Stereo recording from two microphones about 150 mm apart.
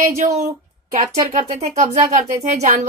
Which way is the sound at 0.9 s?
70° right (ahead or behind).